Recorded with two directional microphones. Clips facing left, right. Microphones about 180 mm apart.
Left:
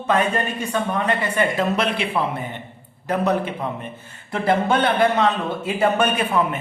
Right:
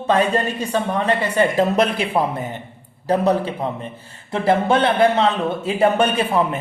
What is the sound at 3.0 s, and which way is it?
Speech, 30° right (ahead or behind).